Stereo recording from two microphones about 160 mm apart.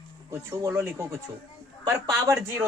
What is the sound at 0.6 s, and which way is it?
Speech, 15° right (ahead or behind).